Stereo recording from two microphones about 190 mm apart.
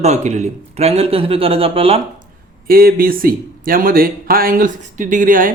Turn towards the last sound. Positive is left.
turn(degrees=-45)  # may be behind; listen again after turning